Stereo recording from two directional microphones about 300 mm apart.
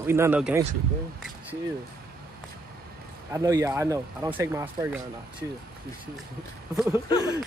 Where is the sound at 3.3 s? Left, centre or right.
Centre.